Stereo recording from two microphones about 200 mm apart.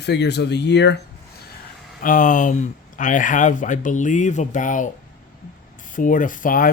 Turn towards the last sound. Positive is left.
turn(degrees=45)  # may be behind; listen again after turning